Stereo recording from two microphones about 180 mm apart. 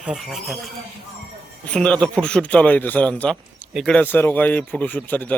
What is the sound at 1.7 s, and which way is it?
Speech, 5° left (ahead or behind).